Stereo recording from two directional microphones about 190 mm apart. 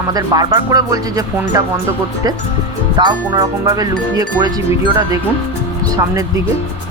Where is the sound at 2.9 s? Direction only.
20° right (ahead or behind).